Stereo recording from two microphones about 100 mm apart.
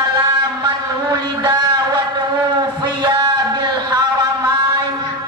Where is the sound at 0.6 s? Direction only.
45° right (ahead or behind).